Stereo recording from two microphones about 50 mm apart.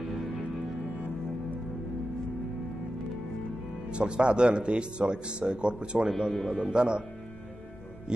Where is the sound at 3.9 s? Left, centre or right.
Centre.